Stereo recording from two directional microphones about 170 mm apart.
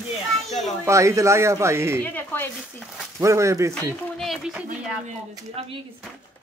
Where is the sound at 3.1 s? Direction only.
15° right (ahead or behind).